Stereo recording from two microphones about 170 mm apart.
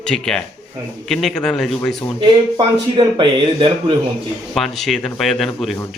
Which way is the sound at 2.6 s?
30° right (ahead or behind).